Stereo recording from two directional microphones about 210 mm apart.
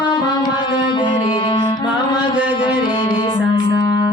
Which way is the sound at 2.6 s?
25° left (ahead or behind).